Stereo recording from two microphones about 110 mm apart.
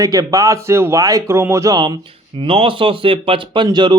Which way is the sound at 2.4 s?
55° right (ahead or behind).